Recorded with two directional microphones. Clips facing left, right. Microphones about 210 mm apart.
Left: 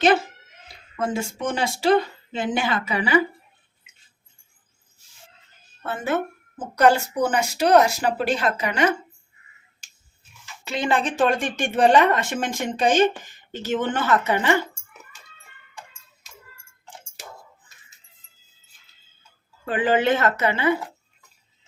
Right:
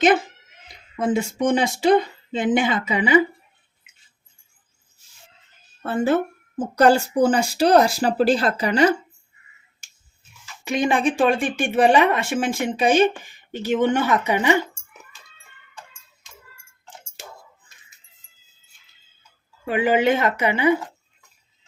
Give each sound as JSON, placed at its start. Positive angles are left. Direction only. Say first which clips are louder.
{"t": 0.7, "sound": "speech", "louder": "right 4 dB", "side_deg": -20}
{"t": 5.8, "sound": "speech", "louder": "right 5 dB", "side_deg": -30}
{"t": 10.6, "sound": "speech", "louder": "right 3 dB", "side_deg": -15}
{"t": 19.6, "sound": "speech", "louder": "right 2 dB", "side_deg": -10}